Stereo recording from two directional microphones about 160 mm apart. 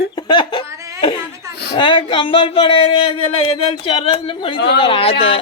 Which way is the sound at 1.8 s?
30° left (ahead or behind).